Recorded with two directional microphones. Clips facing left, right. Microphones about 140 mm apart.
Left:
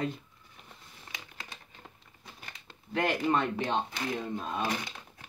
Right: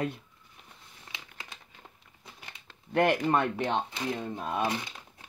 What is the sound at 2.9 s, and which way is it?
Speech, 60° right (ahead or behind).